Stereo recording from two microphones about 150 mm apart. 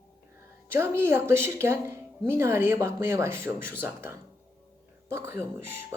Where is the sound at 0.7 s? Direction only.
15° right (ahead or behind).